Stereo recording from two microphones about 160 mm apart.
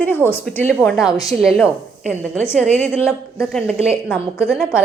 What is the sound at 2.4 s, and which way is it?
A woman's voice, 10° left (ahead or behind).